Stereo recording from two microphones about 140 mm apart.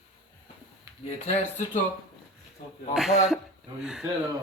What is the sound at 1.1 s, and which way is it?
Speech, 50° left (ahead or behind).